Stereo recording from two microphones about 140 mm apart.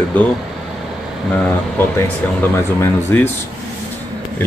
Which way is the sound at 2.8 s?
15° left (ahead or behind).